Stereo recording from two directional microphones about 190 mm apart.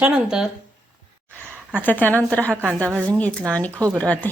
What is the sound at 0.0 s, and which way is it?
Speech, 5° right (ahead or behind).